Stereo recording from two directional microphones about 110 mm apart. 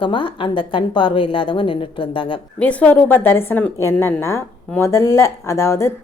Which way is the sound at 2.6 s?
10° left (ahead or behind).